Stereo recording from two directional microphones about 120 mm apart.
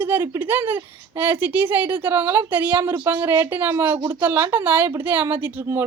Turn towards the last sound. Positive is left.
turn(degrees=-15)  # may be behind; listen again after turning